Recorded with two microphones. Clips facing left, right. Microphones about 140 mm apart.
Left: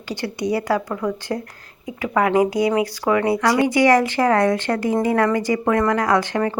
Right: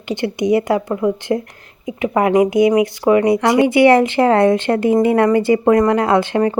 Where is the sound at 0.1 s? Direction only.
20° right (ahead or behind).